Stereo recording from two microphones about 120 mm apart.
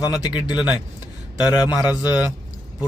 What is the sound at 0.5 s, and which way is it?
Speech, 10° right (ahead or behind).